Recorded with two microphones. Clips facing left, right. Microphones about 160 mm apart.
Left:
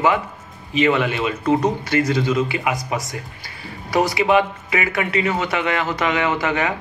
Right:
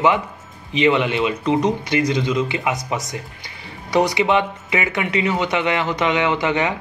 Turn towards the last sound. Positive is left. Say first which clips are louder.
# right 1 dB
turn(degrees=-20)  # may be behind; listen again after turning